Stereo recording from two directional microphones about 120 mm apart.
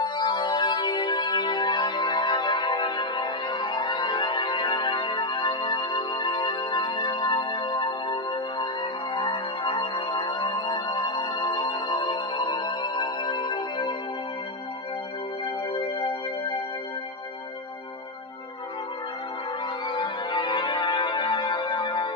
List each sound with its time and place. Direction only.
0.0 s music: 40° left (ahead or behind)
15.8 s music: 40° left (ahead or behind)
19.9 s music: 40° left (ahead or behind)